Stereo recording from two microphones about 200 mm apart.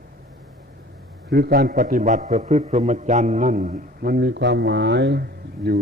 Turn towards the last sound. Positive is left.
turn(degrees=-50)  # may be behind; listen again after turning